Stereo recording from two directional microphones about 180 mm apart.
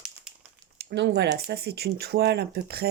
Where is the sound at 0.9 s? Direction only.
70° right (ahead or behind).